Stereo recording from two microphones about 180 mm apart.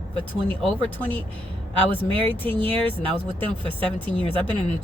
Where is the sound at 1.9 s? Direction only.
30° right (ahead or behind).